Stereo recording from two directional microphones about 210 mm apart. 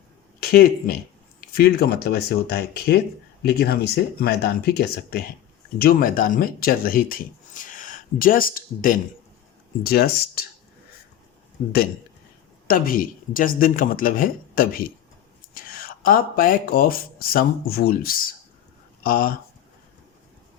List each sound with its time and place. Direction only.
0.3 s speech: 45° left (ahead or behind)
12.6 s speech: 45° left (ahead or behind)